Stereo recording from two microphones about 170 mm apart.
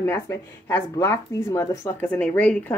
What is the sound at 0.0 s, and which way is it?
Speech, 15° left (ahead or behind).